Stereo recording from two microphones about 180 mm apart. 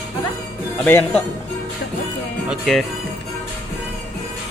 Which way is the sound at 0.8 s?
10° left (ahead or behind).